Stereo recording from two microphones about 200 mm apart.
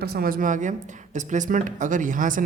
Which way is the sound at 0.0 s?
50° right (ahead or behind).